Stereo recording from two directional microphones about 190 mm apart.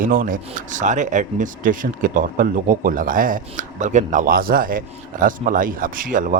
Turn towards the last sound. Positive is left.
turn(degrees=-45)  # may be behind; listen again after turning